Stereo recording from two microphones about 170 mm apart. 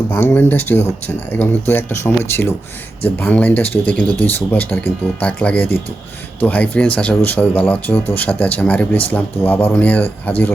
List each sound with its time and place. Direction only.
0.1 s speech: 10° left (ahead or behind)
3.0 s speech: 10° left (ahead or behind)